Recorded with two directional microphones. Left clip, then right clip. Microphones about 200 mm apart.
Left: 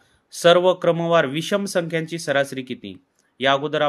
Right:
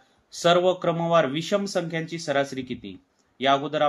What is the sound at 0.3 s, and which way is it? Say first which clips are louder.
Speech: left 5 dB; 35° left (ahead or behind).